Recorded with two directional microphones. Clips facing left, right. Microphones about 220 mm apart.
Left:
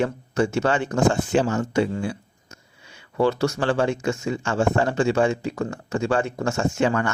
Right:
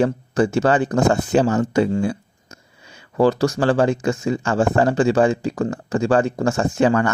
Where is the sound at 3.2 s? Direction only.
35° right (ahead or behind).